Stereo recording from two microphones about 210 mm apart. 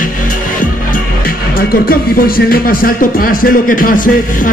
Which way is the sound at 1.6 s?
45° left (ahead or behind).